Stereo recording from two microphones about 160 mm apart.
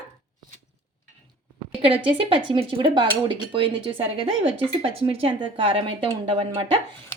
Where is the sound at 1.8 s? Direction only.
35° right (ahead or behind).